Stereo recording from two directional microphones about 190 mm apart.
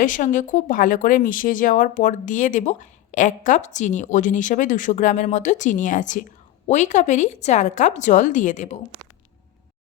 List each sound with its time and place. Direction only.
0.0 s speech: 45° left (ahead or behind)